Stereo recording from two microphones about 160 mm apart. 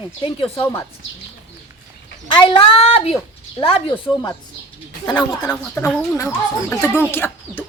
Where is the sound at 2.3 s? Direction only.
35° left (ahead or behind); by 7.6 s 10° left (ahead or behind).